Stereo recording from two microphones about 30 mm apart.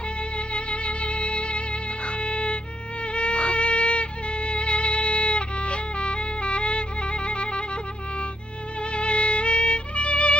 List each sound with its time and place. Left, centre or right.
0.3 s music: left
8.8 s music: left